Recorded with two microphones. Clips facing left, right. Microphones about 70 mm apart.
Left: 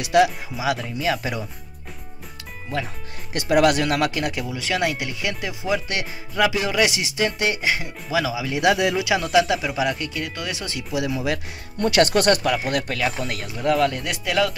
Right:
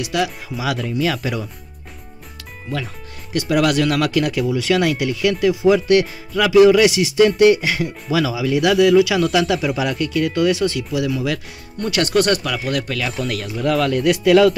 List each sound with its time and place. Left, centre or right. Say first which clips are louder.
0.1 s speech: left 5 dB; left
0.6 s speech: right 3 dB; centre
3.3 s speech: right 1 dB; left
4.5 s speech: right 6 dB; centre
8.5 s speech: right 7 dB; left; by 10.7 s centre
10.7 s speech: right 4 dB; centre
13.3 s speech: right 2 dB; centre